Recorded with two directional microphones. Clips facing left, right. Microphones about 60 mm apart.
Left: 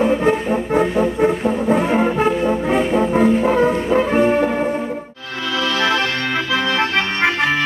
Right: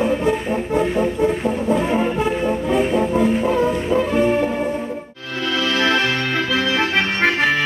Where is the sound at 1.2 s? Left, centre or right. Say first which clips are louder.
Left 2 dB; left.